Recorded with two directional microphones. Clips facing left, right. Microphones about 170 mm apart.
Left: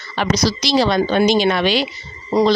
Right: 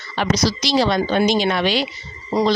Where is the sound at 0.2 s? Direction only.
80° left.